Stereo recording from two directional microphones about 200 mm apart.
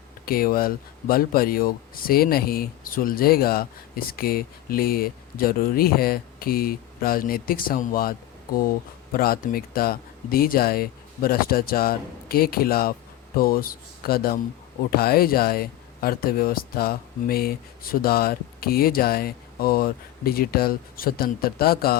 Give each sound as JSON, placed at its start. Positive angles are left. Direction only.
{"t": 0.3, "sound": "speech", "side_deg": 45}
{"t": 9.1, "sound": "speech", "side_deg": 45}